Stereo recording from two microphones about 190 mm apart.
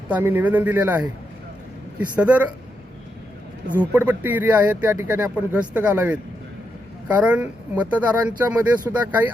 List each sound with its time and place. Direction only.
0.1 s speech: 10° right (ahead or behind)
3.8 s speech: 10° right (ahead or behind)